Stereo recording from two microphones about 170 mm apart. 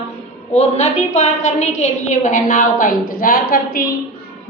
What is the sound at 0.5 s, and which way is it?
A woman's voice, 40° left (ahead or behind).